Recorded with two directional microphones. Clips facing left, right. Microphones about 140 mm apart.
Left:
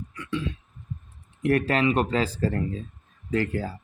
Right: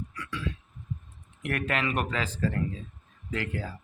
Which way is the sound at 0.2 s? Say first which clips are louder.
Left 6 dB; 25° left (ahead or behind).